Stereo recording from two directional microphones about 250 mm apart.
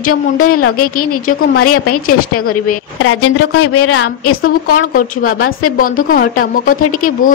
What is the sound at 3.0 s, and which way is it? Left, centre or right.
A woman's voice, left.